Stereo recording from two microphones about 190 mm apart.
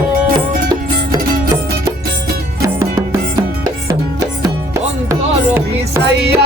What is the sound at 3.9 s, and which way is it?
Music, 15° right (ahead or behind).